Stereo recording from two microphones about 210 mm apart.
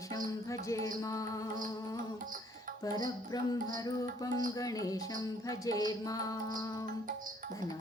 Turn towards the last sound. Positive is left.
turn(degrees=15)  # may be behind; listen again after turning